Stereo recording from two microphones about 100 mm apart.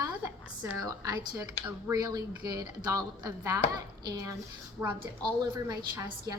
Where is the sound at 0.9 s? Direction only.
35° right (ahead or behind).